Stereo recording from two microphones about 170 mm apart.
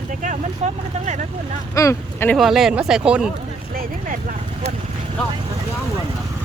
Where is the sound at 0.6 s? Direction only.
40° right (ahead or behind).